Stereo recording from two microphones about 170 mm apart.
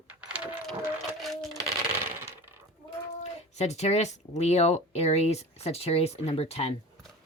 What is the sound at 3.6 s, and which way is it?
Speech, 40° left (ahead or behind).